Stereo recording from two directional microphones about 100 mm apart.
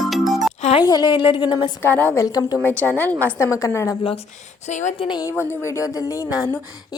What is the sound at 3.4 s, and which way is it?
Speech, 30° left (ahead or behind).